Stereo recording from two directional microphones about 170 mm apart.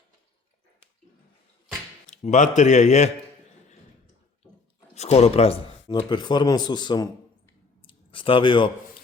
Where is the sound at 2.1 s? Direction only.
45° left (ahead or behind).